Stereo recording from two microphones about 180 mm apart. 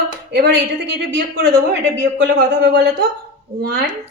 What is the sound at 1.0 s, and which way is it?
Speech, 70° right (ahead or behind).